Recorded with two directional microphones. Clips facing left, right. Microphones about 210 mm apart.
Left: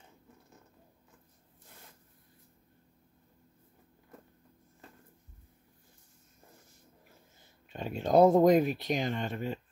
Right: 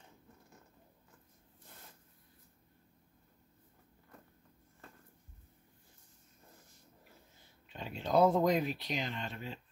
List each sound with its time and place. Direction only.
7.7 s speech: 50° left (ahead or behind)